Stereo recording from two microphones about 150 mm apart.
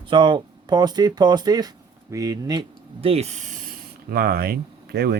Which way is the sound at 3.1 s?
45° right (ahead or behind).